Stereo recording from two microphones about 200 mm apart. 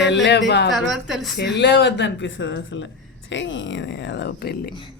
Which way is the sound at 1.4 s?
60° left (ahead or behind).